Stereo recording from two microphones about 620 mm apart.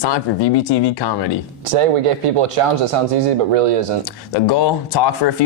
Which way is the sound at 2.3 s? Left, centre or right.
Right.